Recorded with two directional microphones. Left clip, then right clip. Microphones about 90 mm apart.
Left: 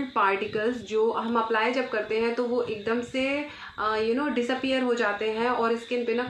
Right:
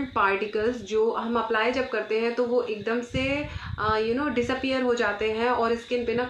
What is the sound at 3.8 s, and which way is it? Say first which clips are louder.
Speech: right 1 dB; centre (ahead or behind).